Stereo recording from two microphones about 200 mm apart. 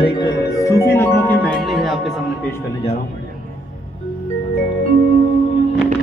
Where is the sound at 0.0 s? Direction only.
20° left (ahead or behind); by 2.1 s centre (ahead or behind).